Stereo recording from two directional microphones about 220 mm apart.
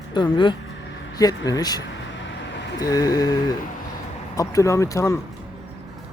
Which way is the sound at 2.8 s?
15° left (ahead or behind).